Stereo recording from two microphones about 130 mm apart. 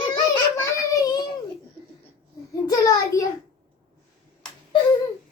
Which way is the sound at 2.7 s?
30° left (ahead or behind).